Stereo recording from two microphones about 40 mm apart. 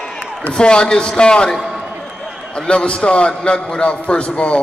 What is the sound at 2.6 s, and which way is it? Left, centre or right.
A man's voice, left.